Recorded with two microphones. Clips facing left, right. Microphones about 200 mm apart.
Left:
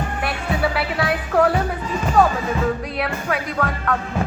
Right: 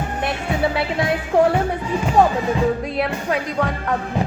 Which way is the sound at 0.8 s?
25° right (ahead or behind).